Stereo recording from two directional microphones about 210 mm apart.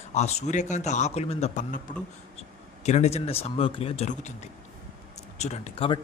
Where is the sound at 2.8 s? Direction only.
30° left (ahead or behind).